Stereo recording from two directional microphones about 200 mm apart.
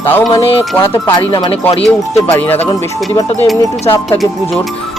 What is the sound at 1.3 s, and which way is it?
Speech, 25° left (ahead or behind).